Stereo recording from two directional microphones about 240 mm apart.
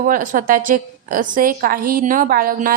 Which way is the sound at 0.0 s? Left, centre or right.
Right.